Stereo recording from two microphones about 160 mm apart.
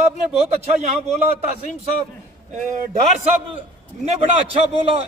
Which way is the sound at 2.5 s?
50° right (ahead or behind).